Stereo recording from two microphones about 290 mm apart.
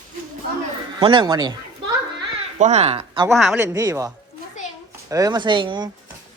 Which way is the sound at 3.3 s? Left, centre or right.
Centre.